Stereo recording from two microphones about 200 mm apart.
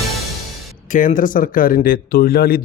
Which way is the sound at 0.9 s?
40° left (ahead or behind).